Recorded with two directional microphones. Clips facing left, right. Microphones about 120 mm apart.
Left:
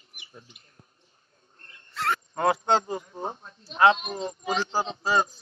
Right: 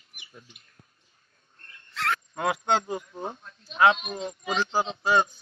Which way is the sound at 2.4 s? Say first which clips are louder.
Left 3 dB; 35° left (ahead or behind).